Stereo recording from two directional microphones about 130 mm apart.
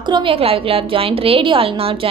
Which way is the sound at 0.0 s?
40° right (ahead or behind).